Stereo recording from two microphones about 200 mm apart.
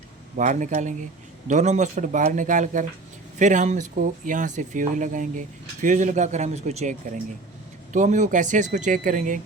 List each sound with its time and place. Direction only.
0.3 s speech: 40° right (ahead or behind)